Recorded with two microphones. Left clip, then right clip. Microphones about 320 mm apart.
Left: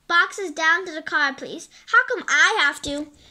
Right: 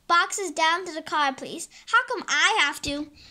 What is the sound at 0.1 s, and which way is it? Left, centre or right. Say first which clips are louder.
Speech: left 2 dB; centre.